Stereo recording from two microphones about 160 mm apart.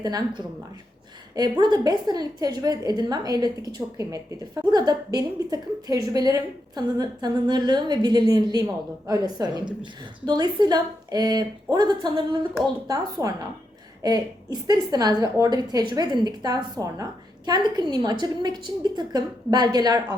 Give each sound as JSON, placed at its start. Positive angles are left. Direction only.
{"t": 0.0, "sound": "a woman's voice", "side_deg": -25}